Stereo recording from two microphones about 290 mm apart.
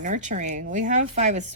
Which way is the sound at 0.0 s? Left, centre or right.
Right.